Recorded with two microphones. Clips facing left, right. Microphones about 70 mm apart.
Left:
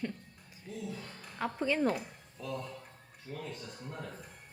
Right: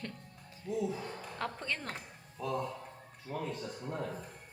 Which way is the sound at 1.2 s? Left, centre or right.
Centre.